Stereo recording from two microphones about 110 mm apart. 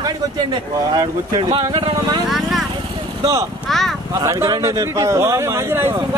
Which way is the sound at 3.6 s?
Centre (ahead or behind).